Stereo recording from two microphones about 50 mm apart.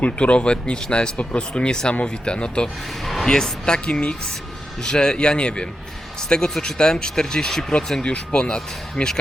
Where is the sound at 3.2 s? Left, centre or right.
Centre.